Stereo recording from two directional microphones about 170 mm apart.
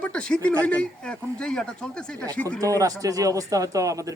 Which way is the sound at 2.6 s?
20° right (ahead or behind).